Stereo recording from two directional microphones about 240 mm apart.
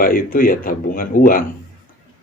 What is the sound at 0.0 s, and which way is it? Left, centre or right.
Speech, left.